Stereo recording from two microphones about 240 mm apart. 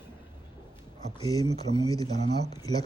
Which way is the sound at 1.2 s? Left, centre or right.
Centre.